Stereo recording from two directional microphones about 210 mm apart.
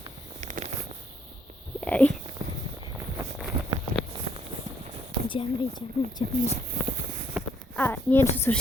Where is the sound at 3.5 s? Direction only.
25° right (ahead or behind).